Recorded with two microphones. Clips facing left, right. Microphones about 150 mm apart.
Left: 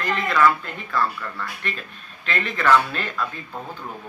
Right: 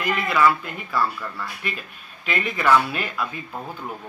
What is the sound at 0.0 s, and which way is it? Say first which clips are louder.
Speech: even; 10° right (ahead or behind).